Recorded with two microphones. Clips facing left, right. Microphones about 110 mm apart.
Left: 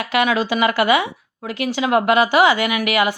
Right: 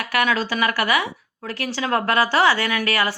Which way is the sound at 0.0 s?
20° left (ahead or behind).